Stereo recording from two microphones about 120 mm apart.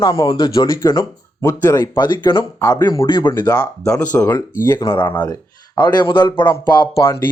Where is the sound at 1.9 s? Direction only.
40° left (ahead or behind).